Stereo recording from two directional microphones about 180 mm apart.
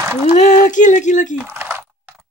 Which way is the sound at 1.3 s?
10° right (ahead or behind).